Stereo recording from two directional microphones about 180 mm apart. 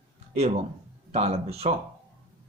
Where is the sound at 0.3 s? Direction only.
35° right (ahead or behind).